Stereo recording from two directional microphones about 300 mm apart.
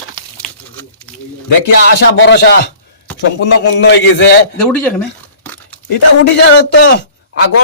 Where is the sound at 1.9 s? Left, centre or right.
Left.